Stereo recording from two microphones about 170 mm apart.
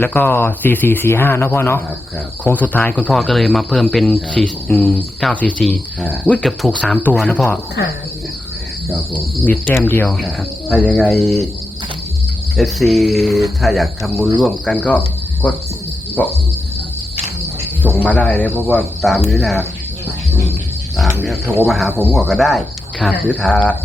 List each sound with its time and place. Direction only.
0.0 s speech: 10° left (ahead or behind)
9.1 s speech: 10° left (ahead or behind)
12.5 s speech: centre (ahead or behind)
17.8 s speech: 10° left (ahead or behind)
19.3 s speech: centre (ahead or behind)
21.4 s speech: 15° right (ahead or behind)
21.7 s speech: centre (ahead or behind)